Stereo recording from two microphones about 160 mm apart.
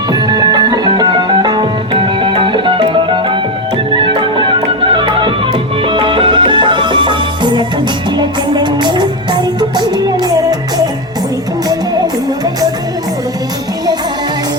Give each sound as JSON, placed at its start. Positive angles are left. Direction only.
{"t": 0.1, "sound": "music", "side_deg": -25}